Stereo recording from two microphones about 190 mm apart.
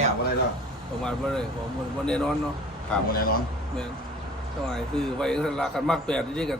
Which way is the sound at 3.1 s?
50° left (ahead or behind).